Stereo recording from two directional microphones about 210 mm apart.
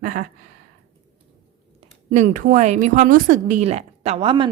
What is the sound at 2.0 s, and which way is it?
Speech, 40° right (ahead or behind).